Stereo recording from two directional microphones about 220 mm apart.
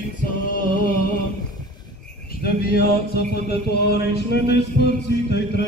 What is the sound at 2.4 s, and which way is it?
Music, 45° left (ahead or behind).